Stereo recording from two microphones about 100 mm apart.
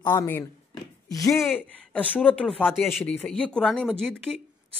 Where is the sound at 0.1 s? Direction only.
30° left (ahead or behind).